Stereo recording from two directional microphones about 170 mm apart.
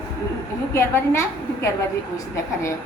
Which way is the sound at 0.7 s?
15° left (ahead or behind).